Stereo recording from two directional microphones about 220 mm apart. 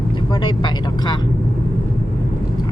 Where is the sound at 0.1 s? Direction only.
20° left (ahead or behind).